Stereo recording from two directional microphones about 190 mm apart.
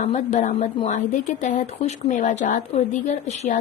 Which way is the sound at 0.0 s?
40° left (ahead or behind).